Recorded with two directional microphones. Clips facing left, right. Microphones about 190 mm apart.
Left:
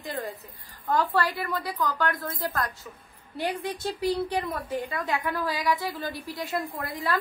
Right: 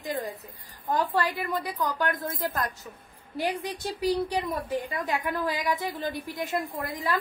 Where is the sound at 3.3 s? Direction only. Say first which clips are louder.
Even; 15° right (ahead or behind).